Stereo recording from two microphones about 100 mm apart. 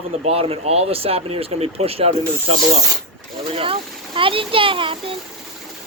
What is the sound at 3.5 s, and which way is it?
Speech, 65° right (ahead or behind).